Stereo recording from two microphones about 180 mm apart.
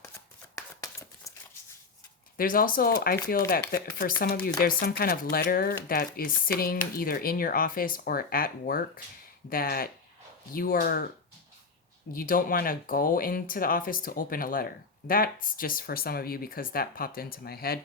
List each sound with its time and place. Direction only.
0.5 s a sound: 15° left (ahead or behind)
2.4 s speech: 50° left (ahead or behind)
12.1 s speech: 50° left (ahead or behind)